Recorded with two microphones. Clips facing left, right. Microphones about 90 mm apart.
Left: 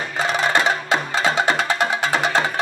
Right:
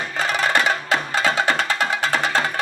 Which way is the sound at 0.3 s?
25° left (ahead or behind).